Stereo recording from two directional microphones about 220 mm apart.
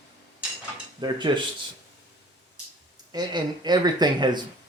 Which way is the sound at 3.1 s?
20° right (ahead or behind).